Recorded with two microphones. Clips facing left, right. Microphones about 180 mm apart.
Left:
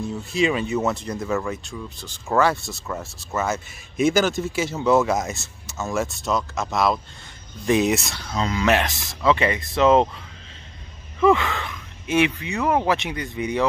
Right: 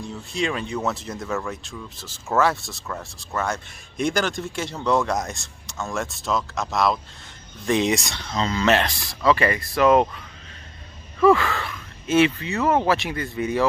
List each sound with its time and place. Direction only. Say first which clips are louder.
0.0 s speech: left 5 dB; centre (ahead or behind); by 13.7 s 15° left (ahead or behind)